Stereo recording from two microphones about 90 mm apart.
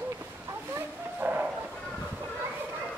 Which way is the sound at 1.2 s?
20° right (ahead or behind).